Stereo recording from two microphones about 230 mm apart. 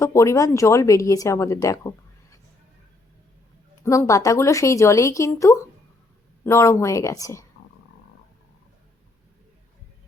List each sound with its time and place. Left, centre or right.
0.0 s a woman's voice: centre
3.8 s a woman's voice: centre